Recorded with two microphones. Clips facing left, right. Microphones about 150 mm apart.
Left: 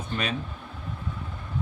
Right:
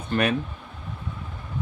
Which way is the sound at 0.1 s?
60° right (ahead or behind).